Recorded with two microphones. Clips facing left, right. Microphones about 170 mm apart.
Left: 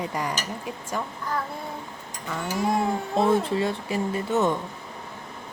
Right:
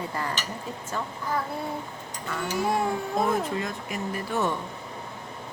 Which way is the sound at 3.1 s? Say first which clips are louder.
Left 6 dB; 30° left (ahead or behind).